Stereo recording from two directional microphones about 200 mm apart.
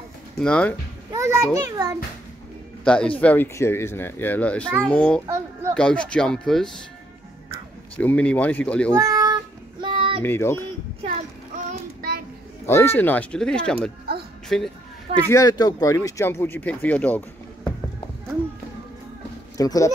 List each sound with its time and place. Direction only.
0.4 s speech: 5° left (ahead or behind)
1.1 s a child's voice: 15° right (ahead or behind)
2.8 s a man's voice: 5° left (ahead or behind)
5.2 s a child's voice: 15° right (ahead or behind)
5.8 s speech: 5° left (ahead or behind)
8.0 s a child's voice: 5° left (ahead or behind)
8.9 s child singing: 15° right (ahead or behind)
10.2 s a child's voice: 10° left (ahead or behind)
11.0 s child singing: 40° right (ahead or behind)
12.6 s a child's voice: 10° left (ahead or behind)
15.2 s a child's voice: 15° left (ahead or behind)
19.5 s speech: 15° left (ahead or behind)